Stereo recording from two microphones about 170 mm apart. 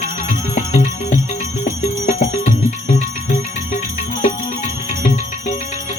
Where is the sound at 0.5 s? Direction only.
45° left (ahead or behind).